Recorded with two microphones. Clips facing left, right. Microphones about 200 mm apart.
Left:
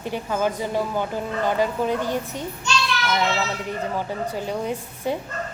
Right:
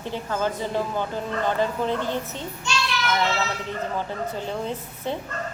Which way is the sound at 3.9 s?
10° left (ahead or behind).